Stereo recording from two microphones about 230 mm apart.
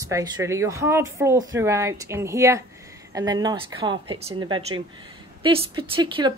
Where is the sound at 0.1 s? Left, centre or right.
Centre.